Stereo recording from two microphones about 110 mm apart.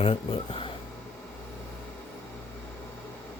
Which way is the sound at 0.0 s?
55° left (ahead or behind).